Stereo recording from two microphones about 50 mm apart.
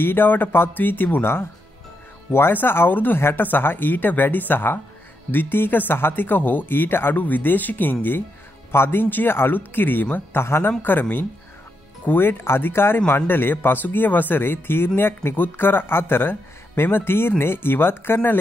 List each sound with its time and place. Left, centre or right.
0.0 s speech: left
1.2 s speech: left
2.5 s speech: left
10.4 s speech: left
10.8 s speech: left